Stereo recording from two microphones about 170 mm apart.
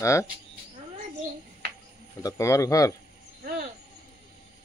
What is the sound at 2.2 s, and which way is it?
Speech, 20° left (ahead or behind).